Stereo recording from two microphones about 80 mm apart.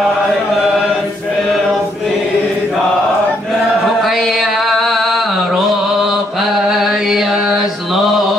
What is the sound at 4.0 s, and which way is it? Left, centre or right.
Mantra, centre.